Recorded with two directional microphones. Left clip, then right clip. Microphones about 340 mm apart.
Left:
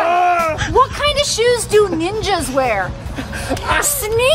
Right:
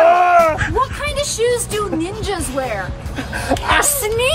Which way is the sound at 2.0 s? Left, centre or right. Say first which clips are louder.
Left 4 dB; centre.